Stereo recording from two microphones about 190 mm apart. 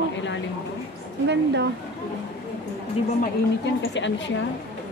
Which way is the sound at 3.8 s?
70° left (ahead or behind).